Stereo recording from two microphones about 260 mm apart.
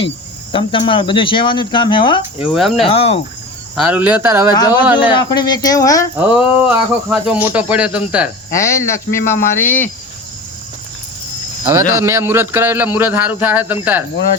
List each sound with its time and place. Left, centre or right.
0.5 s speech: centre
2.4 s speech: centre
2.8 s speech: left
3.8 s speech: centre
4.5 s speech: centre
6.1 s speech: centre
8.5 s speech: centre
11.6 s speech: centre